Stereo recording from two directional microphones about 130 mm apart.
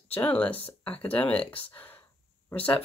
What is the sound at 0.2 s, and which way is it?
Speech, 10° left (ahead or behind).